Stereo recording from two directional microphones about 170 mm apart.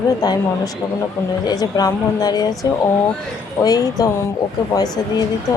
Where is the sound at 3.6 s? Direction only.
20° left (ahead or behind).